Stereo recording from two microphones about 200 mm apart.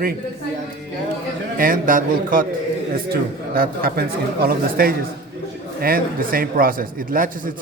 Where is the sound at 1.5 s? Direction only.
45° right (ahead or behind).